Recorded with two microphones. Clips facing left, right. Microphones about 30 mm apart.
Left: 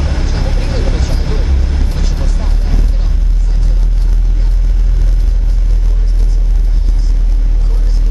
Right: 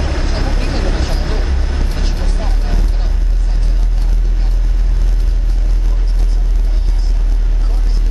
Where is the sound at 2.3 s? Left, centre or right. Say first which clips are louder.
Even; centre.